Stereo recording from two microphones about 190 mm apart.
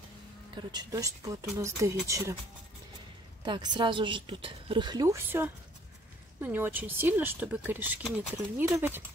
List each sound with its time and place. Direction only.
0.6 s speech: 20° right (ahead or behind)
3.4 s a woman's voice: 25° right (ahead or behind)